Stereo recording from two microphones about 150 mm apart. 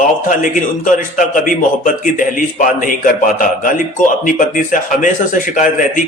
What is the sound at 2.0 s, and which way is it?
A man's voice, 60° left (ahead or behind).